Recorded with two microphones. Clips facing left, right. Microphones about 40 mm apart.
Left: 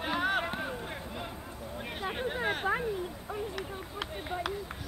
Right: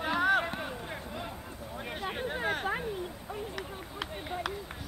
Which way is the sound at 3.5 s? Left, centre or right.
Centre.